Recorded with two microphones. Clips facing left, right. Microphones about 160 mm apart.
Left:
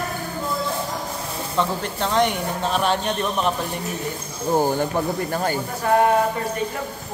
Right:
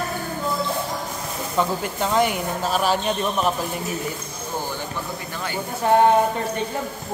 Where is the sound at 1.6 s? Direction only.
5° right (ahead or behind).